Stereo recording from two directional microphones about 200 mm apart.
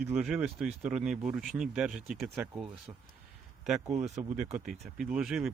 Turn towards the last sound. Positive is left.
turn(degrees=0)  # may be behind; listen again after turning